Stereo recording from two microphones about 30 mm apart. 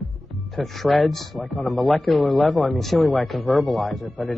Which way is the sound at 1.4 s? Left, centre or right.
Left.